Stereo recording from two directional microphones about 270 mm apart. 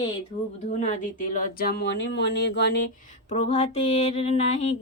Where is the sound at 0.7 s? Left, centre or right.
Left.